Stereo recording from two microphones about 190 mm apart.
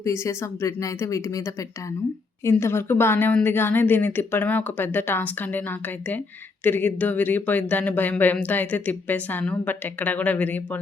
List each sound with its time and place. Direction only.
0.0 s speech: 15° left (ahead or behind)